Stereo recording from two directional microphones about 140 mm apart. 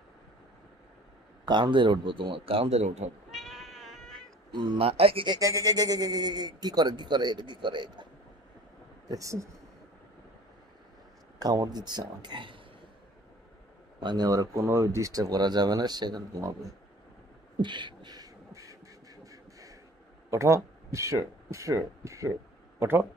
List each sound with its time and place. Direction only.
1.5 s a man's voice: 35° right (ahead or behind); by 3.1 s 50° right (ahead or behind)
3.3 s cat: centre (ahead or behind)
4.5 s a man's voice: 40° right (ahead or behind)
5.4 s speech: 25° right (ahead or behind)
9.1 s speech: 20° right (ahead or behind)
11.3 s a man's voice: 25° right (ahead or behind)
13.9 s speech: 30° right (ahead or behind)
17.6 s beatboxing: 35° right (ahead or behind)
19.2 s a sound: 25° right (ahead or behind)
20.2 s speech: 20° right (ahead or behind)